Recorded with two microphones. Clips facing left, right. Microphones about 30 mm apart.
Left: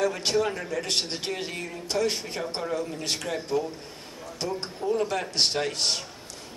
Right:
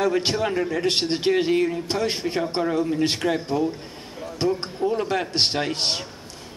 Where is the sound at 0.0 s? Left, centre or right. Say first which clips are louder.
Right 3 dB; right.